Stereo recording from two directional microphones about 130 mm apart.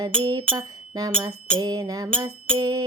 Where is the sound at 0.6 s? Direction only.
30° right (ahead or behind).